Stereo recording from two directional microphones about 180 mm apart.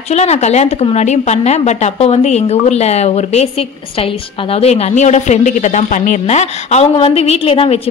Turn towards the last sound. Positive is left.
turn(degrees=30)  # may be behind; listen again after turning